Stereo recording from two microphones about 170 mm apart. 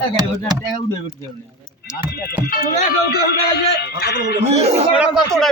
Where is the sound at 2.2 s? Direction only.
60° left (ahead or behind).